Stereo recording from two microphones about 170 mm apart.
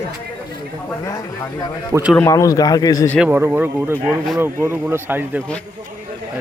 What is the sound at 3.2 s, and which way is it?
Speech, 15° right (ahead or behind).